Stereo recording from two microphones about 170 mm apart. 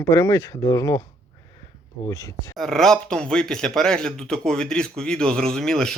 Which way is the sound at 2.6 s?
Centre (ahead or behind).